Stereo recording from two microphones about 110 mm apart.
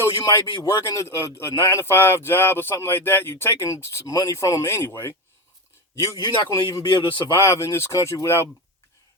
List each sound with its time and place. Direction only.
0.0 s speech: 25° left (ahead or behind)
6.0 s a man's voice: 40° left (ahead or behind)
7.3 s speech: 25° left (ahead or behind)